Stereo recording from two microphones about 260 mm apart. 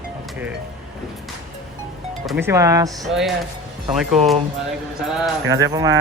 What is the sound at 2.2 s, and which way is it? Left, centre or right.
Speech, centre.